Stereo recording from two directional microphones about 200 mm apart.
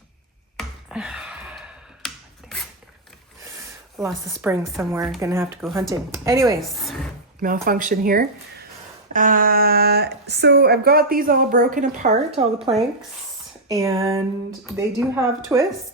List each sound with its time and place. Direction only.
0.5 s a sound: 5° right (ahead or behind)
4.0 s a woman's voice: centre (ahead or behind)
6.4 s speech: centre (ahead or behind)
7.4 s a woman's voice: 45° right (ahead or behind)
13.7 s a woman's voice: 15° right (ahead or behind)